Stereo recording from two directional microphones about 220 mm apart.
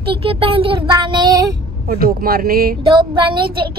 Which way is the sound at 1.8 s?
45° right (ahead or behind).